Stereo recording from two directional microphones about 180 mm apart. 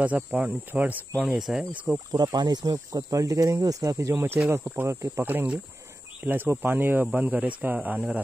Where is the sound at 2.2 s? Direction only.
25° right (ahead or behind); by 8.2 s 5° right (ahead or behind).